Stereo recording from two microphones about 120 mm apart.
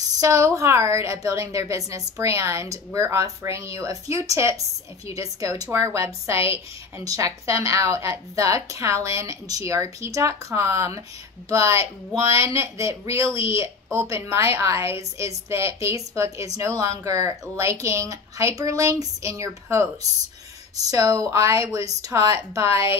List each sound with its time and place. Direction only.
0.2 s a woman's voice: 25° right (ahead or behind)